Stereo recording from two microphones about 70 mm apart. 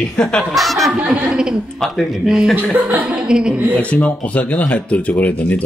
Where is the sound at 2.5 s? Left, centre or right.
Right.